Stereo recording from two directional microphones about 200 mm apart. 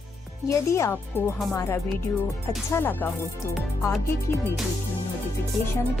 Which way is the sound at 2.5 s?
10° left (ahead or behind).